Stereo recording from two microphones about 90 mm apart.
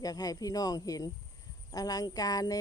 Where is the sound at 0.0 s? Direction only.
45° left (ahead or behind).